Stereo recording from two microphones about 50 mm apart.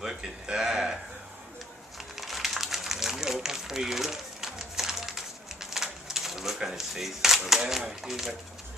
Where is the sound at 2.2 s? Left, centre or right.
Centre.